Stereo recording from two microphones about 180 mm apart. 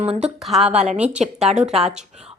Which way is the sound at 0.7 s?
40° right (ahead or behind).